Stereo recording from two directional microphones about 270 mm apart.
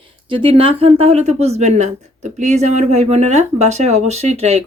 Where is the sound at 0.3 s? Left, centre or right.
Centre.